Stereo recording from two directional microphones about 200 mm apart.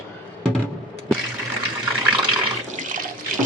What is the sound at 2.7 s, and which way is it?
Water, 40° right (ahead or behind).